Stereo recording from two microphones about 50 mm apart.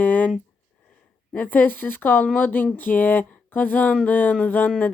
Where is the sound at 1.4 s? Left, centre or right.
Left.